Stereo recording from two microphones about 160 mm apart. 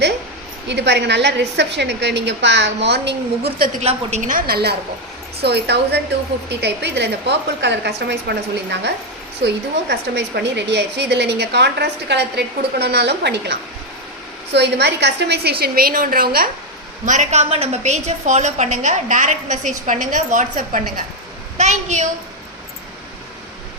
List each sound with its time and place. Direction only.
0.7 s a woman's voice: 90° right
3.8 s a woman's voice: 45° right (ahead or behind); by 4.7 s 75° right (ahead or behind)
5.4 s a woman's voice: 90° right
9.9 s a woman's voice: 90° right; by 16.5 s 65° right (ahead or behind)
17.1 s a woman's voice: 45° right (ahead or behind)